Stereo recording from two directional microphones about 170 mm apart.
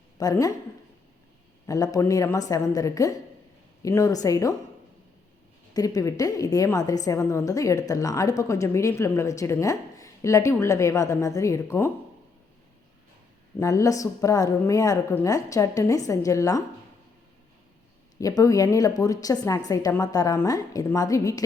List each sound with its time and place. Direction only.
0.2 s a woman's voice: 20° left (ahead or behind)
1.6 s a woman's voice: 20° left (ahead or behind)
5.7 s a woman's voice: 20° left (ahead or behind)
13.6 s a woman's voice: 20° left (ahead or behind)
18.2 s a woman's voice: 20° left (ahead or behind)